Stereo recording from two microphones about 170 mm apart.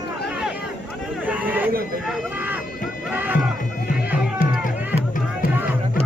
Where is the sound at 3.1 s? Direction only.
10° right (ahead or behind).